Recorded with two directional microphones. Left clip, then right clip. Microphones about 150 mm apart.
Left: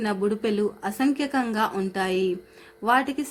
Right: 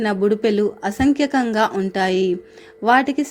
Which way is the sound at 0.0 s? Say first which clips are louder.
Right 7 dB; 25° right (ahead or behind).